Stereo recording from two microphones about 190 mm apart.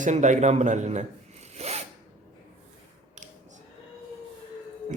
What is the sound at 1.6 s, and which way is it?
Filing, 35° right (ahead or behind).